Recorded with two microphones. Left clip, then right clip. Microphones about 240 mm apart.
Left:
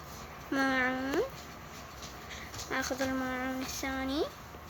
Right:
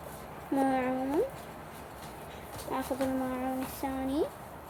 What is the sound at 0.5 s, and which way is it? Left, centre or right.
Speech, centre.